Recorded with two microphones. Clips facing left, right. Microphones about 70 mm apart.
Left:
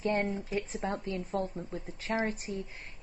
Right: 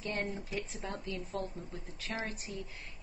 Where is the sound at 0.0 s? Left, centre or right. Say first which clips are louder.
Left 7 dB; left.